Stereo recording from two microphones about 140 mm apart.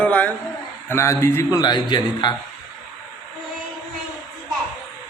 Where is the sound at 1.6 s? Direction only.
30° left (ahead or behind).